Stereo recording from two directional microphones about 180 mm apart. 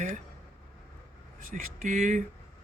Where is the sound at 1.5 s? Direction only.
45° right (ahead or behind).